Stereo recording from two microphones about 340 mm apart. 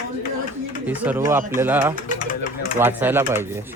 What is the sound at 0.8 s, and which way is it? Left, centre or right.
Speech, centre.